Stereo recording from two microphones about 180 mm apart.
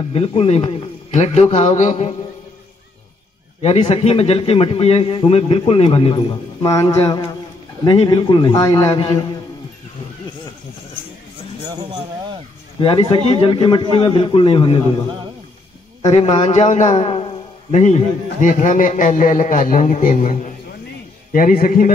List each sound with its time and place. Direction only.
0.1 s a man's voice: 35° left (ahead or behind)
3.6 s a man's voice: 35° left (ahead or behind)
11.7 s a sound: 20° right (ahead or behind)
12.8 s a man's voice: 30° left (ahead or behind)
16.1 s a man's voice: 35° left (ahead or behind)